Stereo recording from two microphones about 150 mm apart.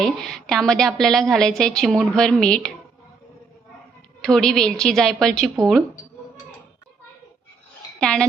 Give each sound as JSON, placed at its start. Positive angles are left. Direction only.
{"t": 0.0, "sound": "a woman's voice", "side_deg": 5}
{"t": 4.2, "sound": "a woman's voice", "side_deg": 5}
{"t": 7.9, "sound": "speech", "side_deg": 5}